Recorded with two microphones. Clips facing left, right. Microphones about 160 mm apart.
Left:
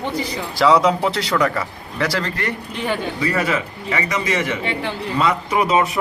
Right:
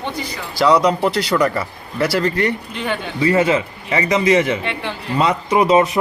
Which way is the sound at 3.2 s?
25° right (ahead or behind).